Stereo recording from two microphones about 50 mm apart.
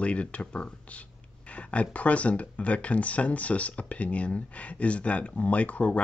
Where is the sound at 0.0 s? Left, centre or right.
Left.